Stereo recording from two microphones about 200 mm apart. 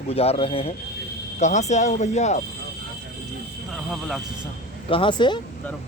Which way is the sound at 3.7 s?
Centre (ahead or behind).